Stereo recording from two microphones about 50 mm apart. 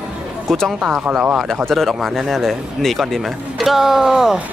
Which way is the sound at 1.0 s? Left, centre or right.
Right.